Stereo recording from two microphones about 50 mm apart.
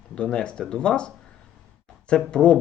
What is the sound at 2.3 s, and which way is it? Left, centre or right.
Speech, centre.